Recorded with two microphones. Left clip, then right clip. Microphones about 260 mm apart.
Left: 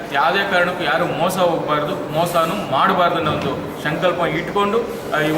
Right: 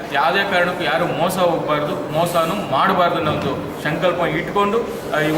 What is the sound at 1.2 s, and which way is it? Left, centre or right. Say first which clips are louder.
Speech: even; left.